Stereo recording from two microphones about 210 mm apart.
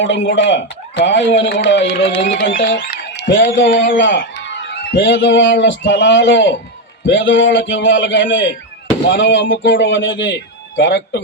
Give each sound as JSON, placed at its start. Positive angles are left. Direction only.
{"t": 0.0, "sound": "a man's voice", "side_deg": 60}